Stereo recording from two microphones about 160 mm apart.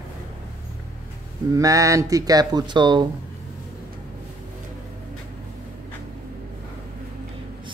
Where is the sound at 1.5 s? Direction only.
20° right (ahead or behind).